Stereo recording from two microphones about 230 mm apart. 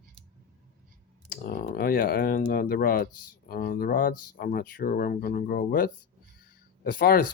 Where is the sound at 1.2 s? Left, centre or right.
Left.